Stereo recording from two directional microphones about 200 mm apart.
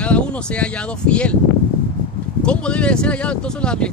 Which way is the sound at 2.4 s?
5° left (ahead or behind).